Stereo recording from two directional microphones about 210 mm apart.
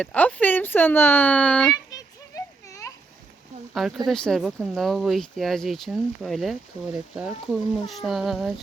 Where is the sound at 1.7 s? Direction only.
15° left (ahead or behind).